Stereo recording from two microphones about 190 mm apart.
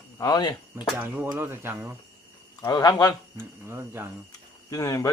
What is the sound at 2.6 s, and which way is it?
Speech, 20° left (ahead or behind).